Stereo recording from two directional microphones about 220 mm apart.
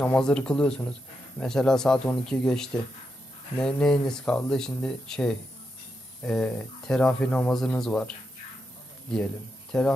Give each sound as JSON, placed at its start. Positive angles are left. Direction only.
{"t": 0.0, "sound": "speech", "side_deg": 5}